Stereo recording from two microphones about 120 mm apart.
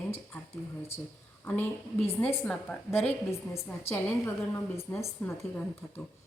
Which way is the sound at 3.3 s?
25° left (ahead or behind).